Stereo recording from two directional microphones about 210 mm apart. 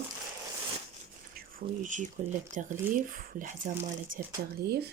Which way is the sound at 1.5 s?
35° right (ahead or behind).